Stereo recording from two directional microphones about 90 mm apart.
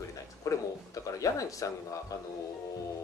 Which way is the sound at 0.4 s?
35° left (ahead or behind).